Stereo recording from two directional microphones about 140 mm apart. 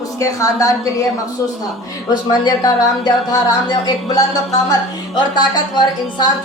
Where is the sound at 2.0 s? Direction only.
30° left (ahead or behind).